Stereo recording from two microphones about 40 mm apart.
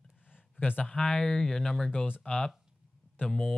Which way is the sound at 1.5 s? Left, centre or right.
Centre.